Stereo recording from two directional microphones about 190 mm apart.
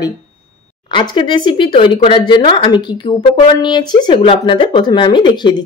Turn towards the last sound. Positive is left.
turn(degrees=25)  # may be behind; listen again after turning